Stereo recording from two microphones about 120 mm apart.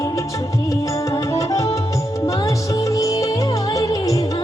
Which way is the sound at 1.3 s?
25° left (ahead or behind).